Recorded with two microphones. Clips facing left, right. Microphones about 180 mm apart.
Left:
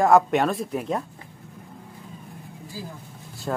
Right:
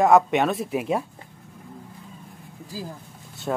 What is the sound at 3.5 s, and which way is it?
Speech, 5° right (ahead or behind).